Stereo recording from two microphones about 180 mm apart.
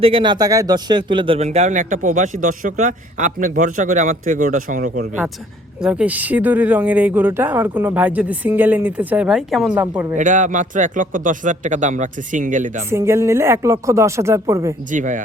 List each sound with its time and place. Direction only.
0.0 s speech: 30° right (ahead or behind); by 5.0 s 50° right (ahead or behind)
5.8 s speech: 5° right (ahead or behind)
9.8 s speech: 15° right (ahead or behind)
10.2 s speech: 45° right (ahead or behind)
12.9 s speech: 15° right (ahead or behind)
14.9 s speech: 45° right (ahead or behind)